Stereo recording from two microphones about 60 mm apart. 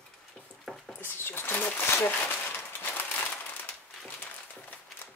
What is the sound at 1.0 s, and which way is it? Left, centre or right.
Speech, left.